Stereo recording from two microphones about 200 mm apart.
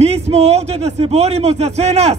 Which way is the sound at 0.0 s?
30° right (ahead or behind).